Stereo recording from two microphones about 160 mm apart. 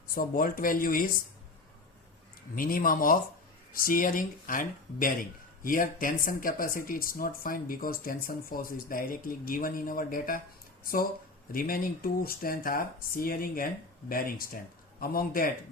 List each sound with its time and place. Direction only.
0.1 s speech: 65° left (ahead or behind)
2.6 s speech: 60° left (ahead or behind)
11.5 s speech: 60° left (ahead or behind)
15.0 s speech: 65° left (ahead or behind)